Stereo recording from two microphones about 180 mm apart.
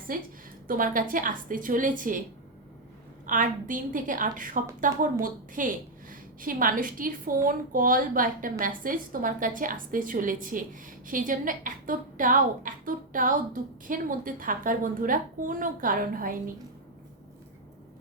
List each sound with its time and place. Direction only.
0.1 s a woman's voice: 50° right (ahead or behind)
3.2 s a woman's voice: 45° right (ahead or behind)